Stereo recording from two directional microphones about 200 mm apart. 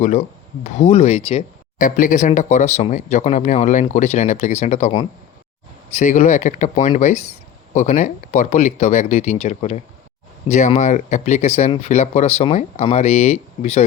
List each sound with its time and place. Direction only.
0.0 s speech: 35° left (ahead or behind)